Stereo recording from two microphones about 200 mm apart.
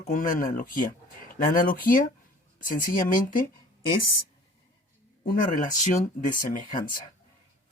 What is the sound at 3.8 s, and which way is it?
Speech, 25° left (ahead or behind).